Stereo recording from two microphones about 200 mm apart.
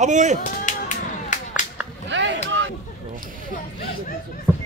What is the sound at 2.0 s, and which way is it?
Chop, 65° right (ahead or behind).